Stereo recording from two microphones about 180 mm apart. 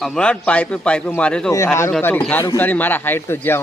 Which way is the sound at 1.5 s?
15° left (ahead or behind).